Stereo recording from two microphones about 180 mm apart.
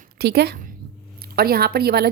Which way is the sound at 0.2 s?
60° right (ahead or behind).